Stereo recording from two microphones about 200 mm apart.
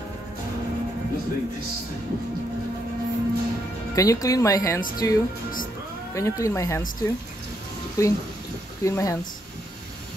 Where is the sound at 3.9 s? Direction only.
15° left (ahead or behind).